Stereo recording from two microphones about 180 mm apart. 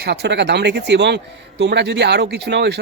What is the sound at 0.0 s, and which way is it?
A man's voice, 65° right (ahead or behind).